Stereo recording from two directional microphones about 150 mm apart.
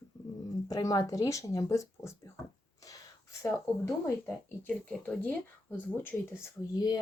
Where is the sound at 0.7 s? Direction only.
25° left (ahead or behind).